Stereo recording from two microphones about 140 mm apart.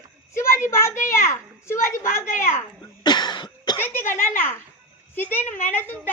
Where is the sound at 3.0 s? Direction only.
30° left (ahead or behind).